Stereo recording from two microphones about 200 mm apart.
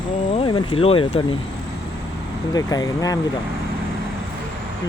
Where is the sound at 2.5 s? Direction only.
20° left (ahead or behind).